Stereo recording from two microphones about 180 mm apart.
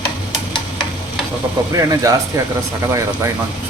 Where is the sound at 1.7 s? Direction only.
20° right (ahead or behind).